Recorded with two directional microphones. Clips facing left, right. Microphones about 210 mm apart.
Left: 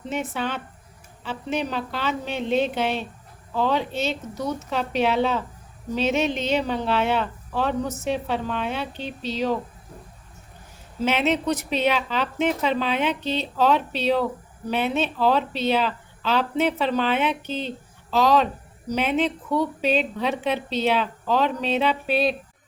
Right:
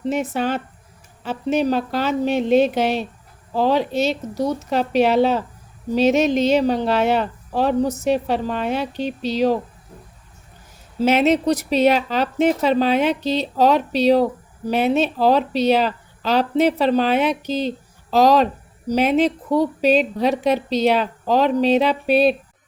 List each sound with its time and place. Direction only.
0.1 s speech: 40° right (ahead or behind)
11.0 s speech: 40° right (ahead or behind)